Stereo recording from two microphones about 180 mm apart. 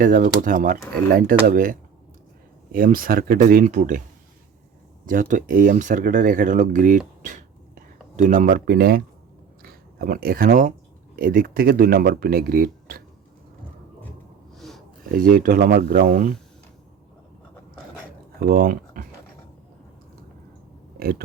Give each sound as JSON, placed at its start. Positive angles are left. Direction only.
{"t": 0.0, "sound": "speech", "side_deg": -50}
{"t": 5.0, "sound": "speech", "side_deg": -50}
{"t": 7.2, "sound": "a sound", "side_deg": -45}
{"t": 9.6, "sound": "speech", "side_deg": -55}
{"t": 14.5, "sound": "a sound", "side_deg": 0}
{"t": 15.1, "sound": "speech", "side_deg": -50}
{"t": 18.3, "sound": "speech", "side_deg": -55}
{"t": 21.0, "sound": "speech", "side_deg": -55}